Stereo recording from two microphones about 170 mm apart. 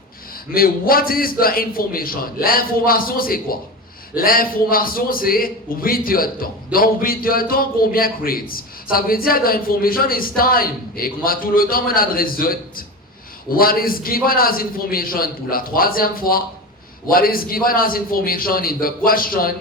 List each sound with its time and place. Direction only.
0.5 s a man's voice: 60° left (ahead or behind)